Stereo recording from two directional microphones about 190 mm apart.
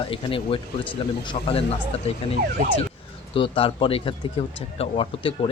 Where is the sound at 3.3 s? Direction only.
30° left (ahead or behind).